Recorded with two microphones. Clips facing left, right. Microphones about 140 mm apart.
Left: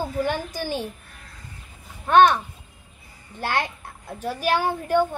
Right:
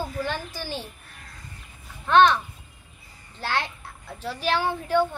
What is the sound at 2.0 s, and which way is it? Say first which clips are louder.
Speech: left 2 dB; 50° left (ahead or behind).